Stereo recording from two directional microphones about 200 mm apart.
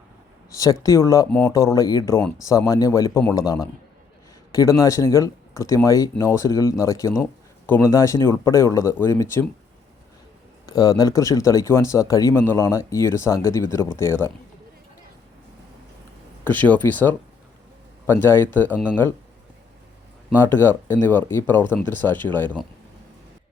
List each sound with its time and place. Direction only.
0.5 s speech: 15° left (ahead or behind)
10.7 s speech: 20° left (ahead or behind)
16.4 s speech: 10° left (ahead or behind)
20.3 s speech: 10° left (ahead or behind)